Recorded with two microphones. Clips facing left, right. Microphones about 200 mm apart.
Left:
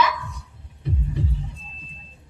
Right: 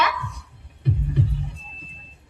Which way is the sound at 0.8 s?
65° right (ahead or behind).